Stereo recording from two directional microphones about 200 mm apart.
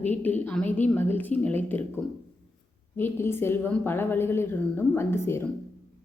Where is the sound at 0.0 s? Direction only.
10° left (ahead or behind).